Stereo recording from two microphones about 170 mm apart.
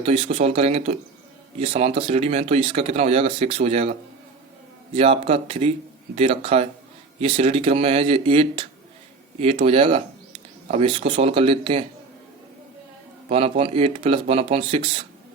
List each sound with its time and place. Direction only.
0.0 s speech: 35° right (ahead or behind)
4.9 s speech: 35° right (ahead or behind)
13.2 s speech: 35° right (ahead or behind)